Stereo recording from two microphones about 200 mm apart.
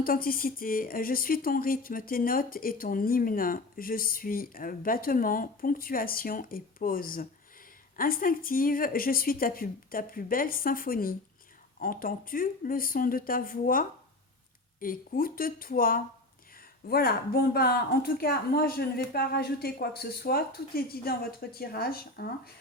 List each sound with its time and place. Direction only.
0.0 s speech: 45° left (ahead or behind)